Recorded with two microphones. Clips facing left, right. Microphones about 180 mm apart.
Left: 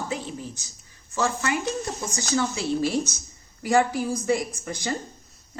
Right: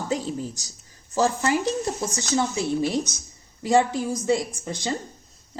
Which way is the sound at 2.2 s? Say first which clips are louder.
Left 1 dB; 20° right (ahead or behind).